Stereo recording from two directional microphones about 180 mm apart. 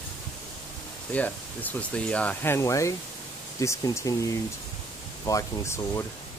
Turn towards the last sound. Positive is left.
turn(degrees=15)  # may be behind; listen again after turning